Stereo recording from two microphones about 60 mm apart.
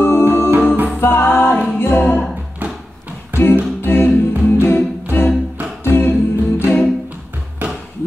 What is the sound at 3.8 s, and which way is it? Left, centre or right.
Music, left.